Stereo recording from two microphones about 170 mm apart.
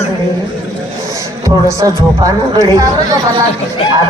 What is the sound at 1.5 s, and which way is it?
Speech, 20° right (ahead or behind).